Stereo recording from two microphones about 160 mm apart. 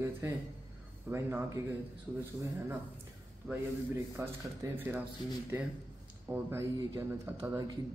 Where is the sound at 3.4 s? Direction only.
5° right (ahead or behind).